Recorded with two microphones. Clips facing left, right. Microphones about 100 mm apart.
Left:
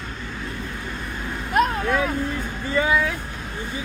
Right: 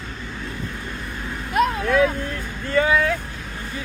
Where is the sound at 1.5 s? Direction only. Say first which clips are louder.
Even; 40° left (ahead or behind).